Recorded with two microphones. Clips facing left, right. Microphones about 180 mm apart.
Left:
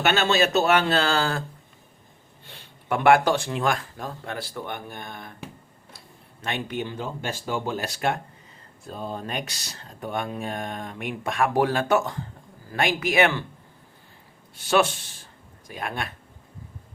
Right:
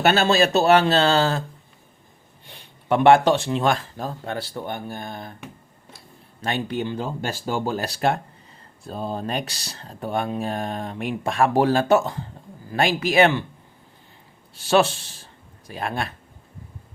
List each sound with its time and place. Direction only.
0.0 s speech: 35° right (ahead or behind)
2.5 s speech: 20° right (ahead or behind)
6.4 s speech: 35° right (ahead or behind)
14.5 s a man's voice: 30° right (ahead or behind)